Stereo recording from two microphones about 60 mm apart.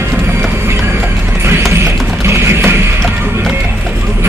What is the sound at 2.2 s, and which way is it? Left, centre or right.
Music, right.